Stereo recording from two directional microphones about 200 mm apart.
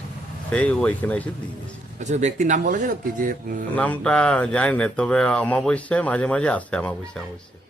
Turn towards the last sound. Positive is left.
turn(degrees=5)  # may be behind; listen again after turning